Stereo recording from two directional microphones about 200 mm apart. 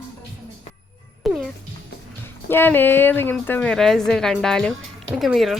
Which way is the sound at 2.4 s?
10° left (ahead or behind).